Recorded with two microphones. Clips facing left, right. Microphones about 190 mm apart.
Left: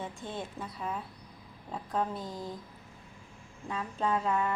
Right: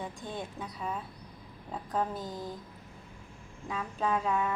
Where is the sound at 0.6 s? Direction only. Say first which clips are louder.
Even; centre (ahead or behind).